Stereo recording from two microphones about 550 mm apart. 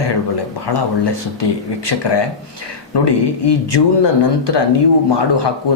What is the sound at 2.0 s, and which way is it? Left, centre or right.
Speech, left.